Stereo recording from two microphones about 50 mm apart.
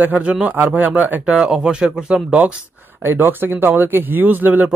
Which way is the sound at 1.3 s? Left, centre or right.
Centre.